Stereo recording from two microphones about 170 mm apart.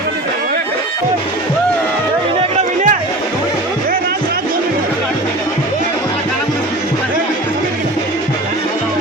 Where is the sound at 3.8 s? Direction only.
60° right (ahead or behind).